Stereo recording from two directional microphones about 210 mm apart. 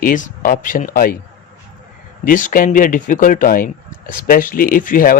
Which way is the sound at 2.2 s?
40° left (ahead or behind).